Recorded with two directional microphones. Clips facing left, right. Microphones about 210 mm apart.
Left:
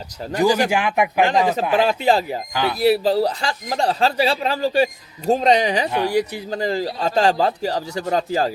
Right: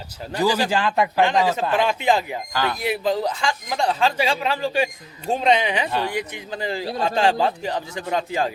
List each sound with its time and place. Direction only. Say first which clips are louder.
0.3 s speech: left 3 dB; 15° left (ahead or behind)
1.8 s speech: left 3 dB; 35° left (ahead or behind)
2.5 s speech: left 1 dB; 15° left (ahead or behind)
2.7 s speech: left 9 dB; 35° left (ahead or behind)
5.9 s speech: left 3 dB; 15° left (ahead or behind)
6.1 s speech: left 7 dB; 35° left (ahead or behind)